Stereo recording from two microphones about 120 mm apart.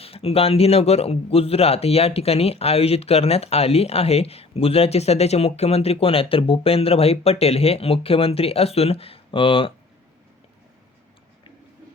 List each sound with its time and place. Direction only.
0.0 s a man's voice: 55° left (ahead or behind)